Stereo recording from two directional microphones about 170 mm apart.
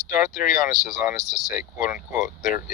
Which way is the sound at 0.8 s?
5° right (ahead or behind).